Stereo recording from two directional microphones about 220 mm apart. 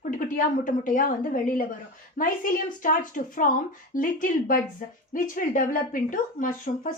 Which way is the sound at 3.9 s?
40° left (ahead or behind).